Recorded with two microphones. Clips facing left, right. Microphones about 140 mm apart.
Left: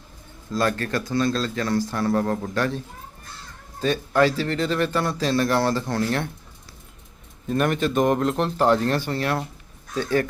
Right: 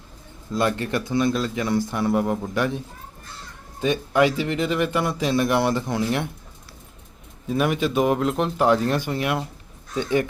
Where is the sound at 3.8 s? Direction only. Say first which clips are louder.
Even; 15° right (ahead or behind).